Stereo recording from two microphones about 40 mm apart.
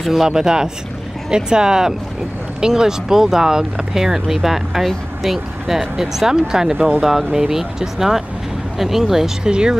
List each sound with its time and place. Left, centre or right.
0.0 s speech: centre
0.3 s speech: centre
9.4 s speech: right